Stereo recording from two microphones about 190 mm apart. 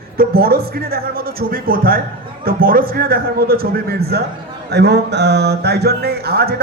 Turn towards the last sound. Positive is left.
turn(degrees=-55)  # may be behind; listen again after turning